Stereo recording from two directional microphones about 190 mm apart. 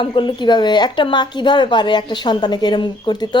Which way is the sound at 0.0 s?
25° left (ahead or behind).